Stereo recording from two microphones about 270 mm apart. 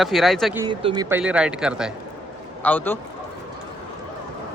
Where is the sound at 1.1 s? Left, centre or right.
Centre.